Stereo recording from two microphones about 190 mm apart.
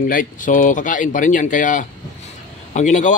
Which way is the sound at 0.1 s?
45° left (ahead or behind).